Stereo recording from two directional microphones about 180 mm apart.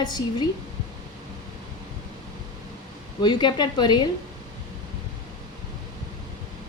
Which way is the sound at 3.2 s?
25° left (ahead or behind).